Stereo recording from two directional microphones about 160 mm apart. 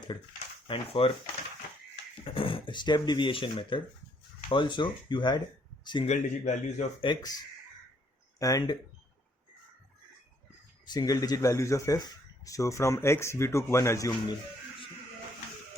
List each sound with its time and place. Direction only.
0.7 s speech: 35° left (ahead or behind)
2.3 s speech: 35° left (ahead or behind)
6.1 s a man's voice: 45° left (ahead or behind)
7.0 s speech: 25° left (ahead or behind)
8.4 s speech: 20° left (ahead or behind)
10.8 s speech: 25° left (ahead or behind)